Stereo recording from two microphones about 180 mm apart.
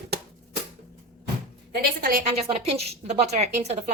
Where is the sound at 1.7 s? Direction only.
55° right (ahead or behind).